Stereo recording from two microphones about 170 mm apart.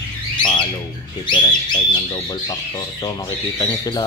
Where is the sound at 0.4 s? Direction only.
25° left (ahead or behind).